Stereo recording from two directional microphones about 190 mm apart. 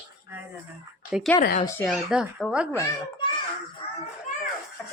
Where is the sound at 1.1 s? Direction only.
5° right (ahead or behind).